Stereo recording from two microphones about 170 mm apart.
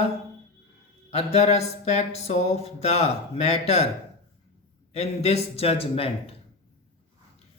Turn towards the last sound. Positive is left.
turn(degrees=35)  # may be behind; listen again after turning